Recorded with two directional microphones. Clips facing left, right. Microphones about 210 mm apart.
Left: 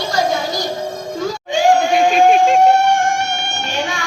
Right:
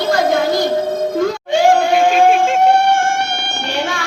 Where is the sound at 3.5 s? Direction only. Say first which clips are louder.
Right 2 dB; 60° right (ahead or behind).